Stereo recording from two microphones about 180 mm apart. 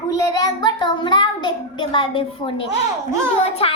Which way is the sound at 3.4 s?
35° left (ahead or behind).